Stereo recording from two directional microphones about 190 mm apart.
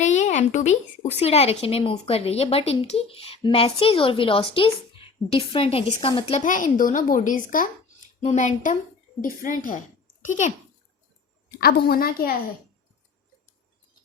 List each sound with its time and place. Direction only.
0.0 s a sound: 40° left (ahead or behind)
1.2 s a woman's voice: 30° left (ahead or behind)
11.5 s a woman's voice: 55° left (ahead or behind)